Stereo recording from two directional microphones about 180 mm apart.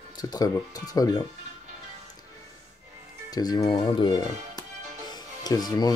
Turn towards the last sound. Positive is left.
turn(degrees=20)  # may be behind; listen again after turning